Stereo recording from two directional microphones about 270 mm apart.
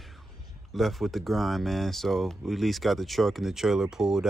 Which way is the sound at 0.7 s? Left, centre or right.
Centre.